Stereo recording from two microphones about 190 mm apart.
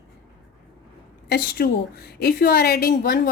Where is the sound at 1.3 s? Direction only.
55° left (ahead or behind).